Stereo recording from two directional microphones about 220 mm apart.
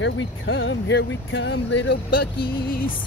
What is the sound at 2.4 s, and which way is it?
Music, 40° left (ahead or behind).